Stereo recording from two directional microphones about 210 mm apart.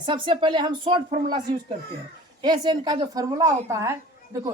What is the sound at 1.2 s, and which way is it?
Speech, 40° right (ahead or behind).